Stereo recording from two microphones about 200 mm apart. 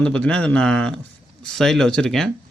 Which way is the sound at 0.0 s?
5° left (ahead or behind).